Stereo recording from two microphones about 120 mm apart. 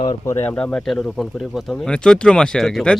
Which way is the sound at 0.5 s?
5° left (ahead or behind).